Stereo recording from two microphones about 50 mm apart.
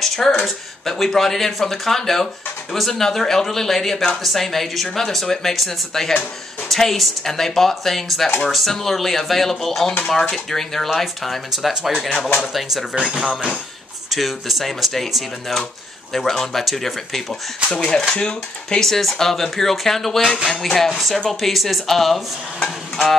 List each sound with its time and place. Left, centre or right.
0.0 s a sound: centre
0.8 s speech: centre
4.2 s stir: centre
4.9 s speech: centre
6.7 s stir: centre
11.5 s stir: centre
12.9 s speech: centre
14.1 s stir: centre
17.6 s speech: centre
20.2 s speech: centre
20.4 s speech: centre
20.9 s stir: centre